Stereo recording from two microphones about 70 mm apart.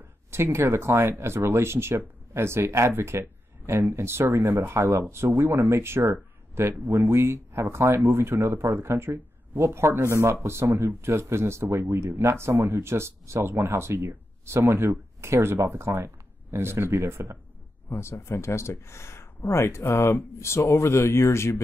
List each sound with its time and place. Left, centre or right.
0.3 s speech: right
17.8 s speech: left